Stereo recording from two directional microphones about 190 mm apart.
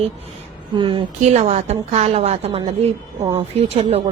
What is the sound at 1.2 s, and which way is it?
Speech, 35° right (ahead or behind).